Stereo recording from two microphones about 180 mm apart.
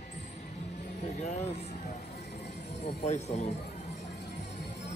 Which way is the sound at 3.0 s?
40° left (ahead or behind).